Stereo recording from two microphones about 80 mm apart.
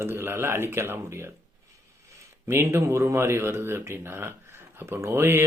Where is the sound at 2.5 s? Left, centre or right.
Right.